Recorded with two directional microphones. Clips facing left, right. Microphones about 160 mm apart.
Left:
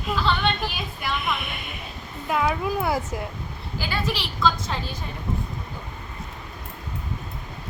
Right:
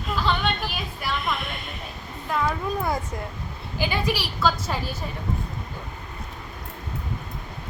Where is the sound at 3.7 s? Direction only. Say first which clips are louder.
Right 3 dB; 15° right (ahead or behind).